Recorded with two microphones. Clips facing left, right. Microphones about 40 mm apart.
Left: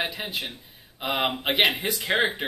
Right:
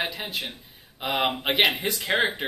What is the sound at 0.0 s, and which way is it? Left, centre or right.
Speech, centre.